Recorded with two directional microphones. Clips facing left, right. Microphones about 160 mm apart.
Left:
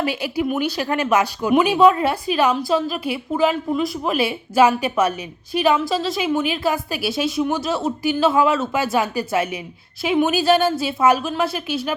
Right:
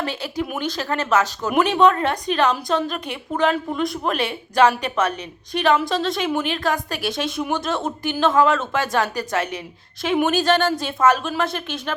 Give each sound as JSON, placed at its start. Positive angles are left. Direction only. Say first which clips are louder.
{"t": 0.0, "sound": "a woman's voice", "louder": "left 4 dB", "side_deg": 10}